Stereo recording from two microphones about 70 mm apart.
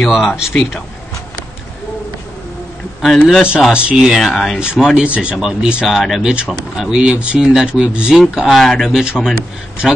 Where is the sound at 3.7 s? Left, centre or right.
Centre.